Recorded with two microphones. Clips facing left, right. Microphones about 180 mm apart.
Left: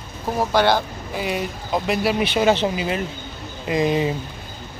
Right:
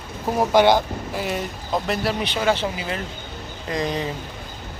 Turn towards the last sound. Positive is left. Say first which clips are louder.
# left 5 dB
turn(degrees=5)  # may be behind; listen again after turning